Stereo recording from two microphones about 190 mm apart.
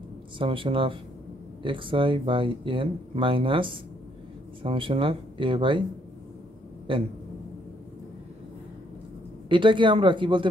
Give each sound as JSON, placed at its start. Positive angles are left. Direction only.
{"t": 0.4, "sound": "speech", "side_deg": -25}
{"t": 9.5, "sound": "speech", "side_deg": -25}